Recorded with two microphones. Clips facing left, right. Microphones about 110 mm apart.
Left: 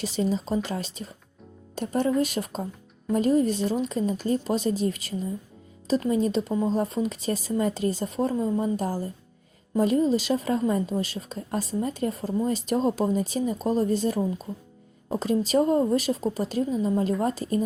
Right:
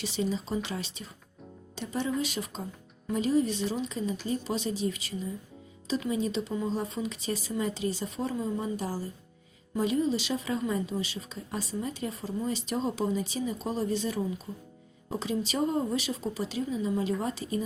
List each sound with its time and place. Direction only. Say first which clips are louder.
0.0 s a woman's voice: left 5 dB; 45° left (ahead or behind)